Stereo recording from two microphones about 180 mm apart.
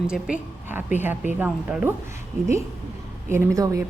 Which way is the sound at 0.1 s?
10° right (ahead or behind).